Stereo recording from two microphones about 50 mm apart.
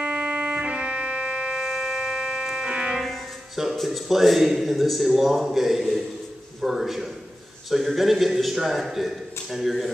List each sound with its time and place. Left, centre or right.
0.0 s music: right
1.6 s music: centre
3.0 s music: centre
3.7 s a man's voice: centre